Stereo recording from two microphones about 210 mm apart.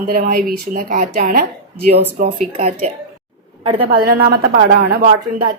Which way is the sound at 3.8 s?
45° right (ahead or behind).